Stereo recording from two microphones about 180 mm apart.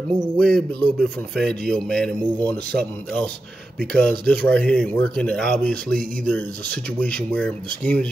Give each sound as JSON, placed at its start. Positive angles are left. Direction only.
{"t": 0.4, "sound": "speech", "side_deg": 5}
{"t": 3.9, "sound": "speech", "side_deg": 5}